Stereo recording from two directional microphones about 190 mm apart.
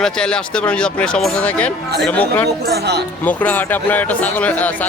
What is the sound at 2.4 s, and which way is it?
Speech, 60° right (ahead or behind).